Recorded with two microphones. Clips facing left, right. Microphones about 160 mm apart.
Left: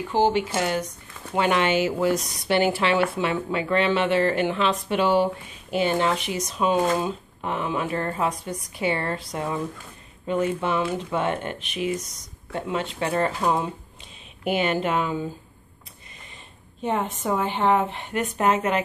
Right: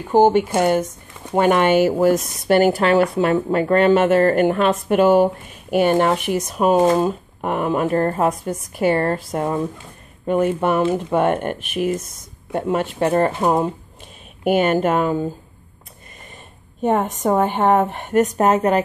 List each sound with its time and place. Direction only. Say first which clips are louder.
0.1 s speech: right 8 dB; 50° right (ahead or behind)
16.8 s speech: right 7 dB; 50° right (ahead or behind)